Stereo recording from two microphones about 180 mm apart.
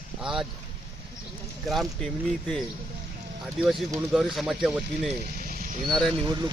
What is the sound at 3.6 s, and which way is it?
Speech, centre (ahead or behind).